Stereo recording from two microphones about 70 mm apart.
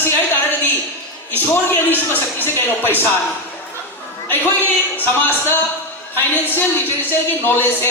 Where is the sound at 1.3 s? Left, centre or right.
Left.